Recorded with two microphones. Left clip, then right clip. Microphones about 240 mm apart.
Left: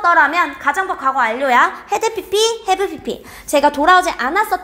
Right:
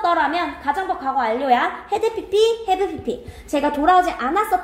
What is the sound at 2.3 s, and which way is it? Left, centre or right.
A woman's voice, left.